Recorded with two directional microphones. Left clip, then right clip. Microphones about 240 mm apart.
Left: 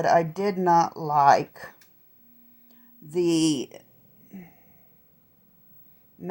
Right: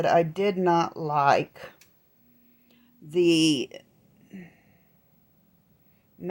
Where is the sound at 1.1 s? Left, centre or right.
Right.